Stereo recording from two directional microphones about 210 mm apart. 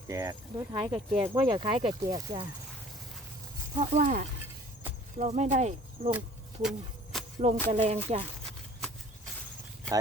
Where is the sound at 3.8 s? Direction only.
35° right (ahead or behind).